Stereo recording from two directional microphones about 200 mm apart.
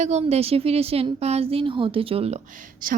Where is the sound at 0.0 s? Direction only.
35° right (ahead or behind).